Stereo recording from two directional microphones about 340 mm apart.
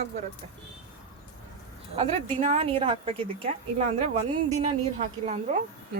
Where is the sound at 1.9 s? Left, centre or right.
Centre.